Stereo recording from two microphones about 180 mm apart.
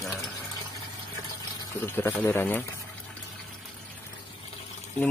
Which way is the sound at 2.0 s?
10° left (ahead or behind).